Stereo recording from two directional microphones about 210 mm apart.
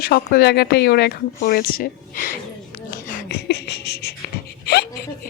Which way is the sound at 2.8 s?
45° left (ahead or behind).